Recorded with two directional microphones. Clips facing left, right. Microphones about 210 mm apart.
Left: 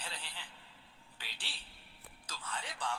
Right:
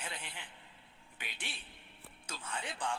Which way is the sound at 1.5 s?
20° right (ahead or behind).